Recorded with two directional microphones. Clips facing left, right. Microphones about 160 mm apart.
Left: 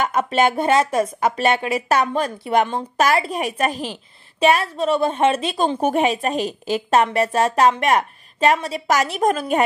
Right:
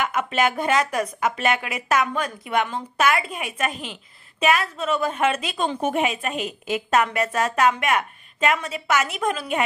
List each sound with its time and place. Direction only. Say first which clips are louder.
0.0 s speech: left 4 dB; 35° left (ahead or behind)